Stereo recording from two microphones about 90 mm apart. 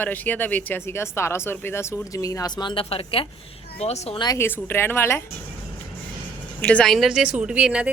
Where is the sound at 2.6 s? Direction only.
75° left (ahead or behind); by 3.2 s 90° left.